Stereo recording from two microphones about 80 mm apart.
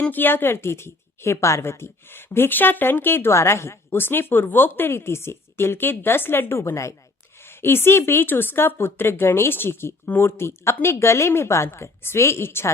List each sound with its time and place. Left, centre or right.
0.1 s a woman's voice: left